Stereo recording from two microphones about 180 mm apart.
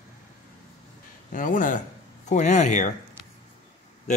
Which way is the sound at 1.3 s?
45° left (ahead or behind).